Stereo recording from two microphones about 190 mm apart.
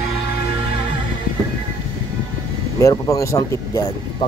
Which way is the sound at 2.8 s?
15° left (ahead or behind).